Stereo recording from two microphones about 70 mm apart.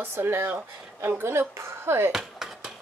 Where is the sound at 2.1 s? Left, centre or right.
Centre.